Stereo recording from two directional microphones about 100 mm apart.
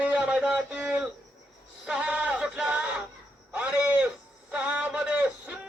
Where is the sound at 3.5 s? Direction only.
15° right (ahead or behind).